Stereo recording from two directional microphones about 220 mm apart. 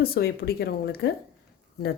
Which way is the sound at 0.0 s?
45° left (ahead or behind).